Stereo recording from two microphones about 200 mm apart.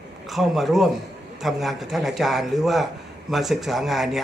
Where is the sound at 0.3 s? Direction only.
Centre (ahead or behind).